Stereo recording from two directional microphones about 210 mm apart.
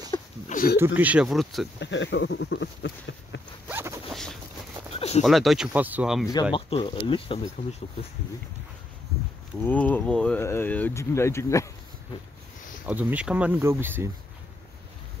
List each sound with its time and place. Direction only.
0.1 s a sound: 20° left (ahead or behind)
0.5 s a sound: 45° left (ahead or behind)
0.7 s speech: 10° right (ahead or behind)
1.8 s speech: 60° left (ahead or behind)
3.6 s zipper: 10° right (ahead or behind)
4.1 s boat: centre (ahead or behind)
5.2 s speech: centre (ahead or behind)
6.5 s speech: 25° left (ahead or behind)
9.7 s speech: 10° left (ahead or behind)
12.8 s speech: 5° right (ahead or behind)